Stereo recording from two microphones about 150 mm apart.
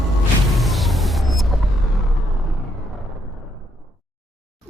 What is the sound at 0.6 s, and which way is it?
Vehicle, centre (ahead or behind).